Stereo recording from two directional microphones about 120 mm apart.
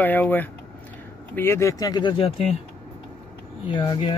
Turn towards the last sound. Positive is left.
turn(degrees=45)  # may be behind; listen again after turning